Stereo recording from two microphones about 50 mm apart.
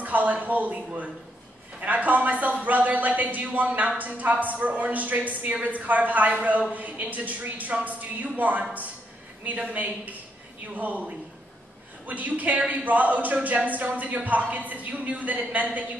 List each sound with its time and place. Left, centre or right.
0.0 s a man's voice: right